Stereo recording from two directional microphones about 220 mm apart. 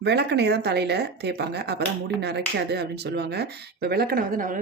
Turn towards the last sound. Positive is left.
turn(degrees=-40)  # may be behind; listen again after turning